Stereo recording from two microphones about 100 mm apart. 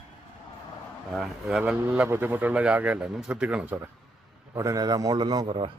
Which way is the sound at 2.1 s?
20° right (ahead or behind).